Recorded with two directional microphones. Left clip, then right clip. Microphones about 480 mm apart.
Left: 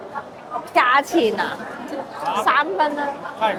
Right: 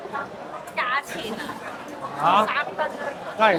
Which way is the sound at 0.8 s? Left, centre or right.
Left.